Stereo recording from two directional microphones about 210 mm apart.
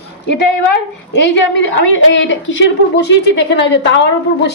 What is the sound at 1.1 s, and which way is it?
A woman's voice, 60° left (ahead or behind).